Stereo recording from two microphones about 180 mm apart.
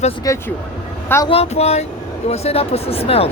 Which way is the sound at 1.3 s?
35° left (ahead or behind).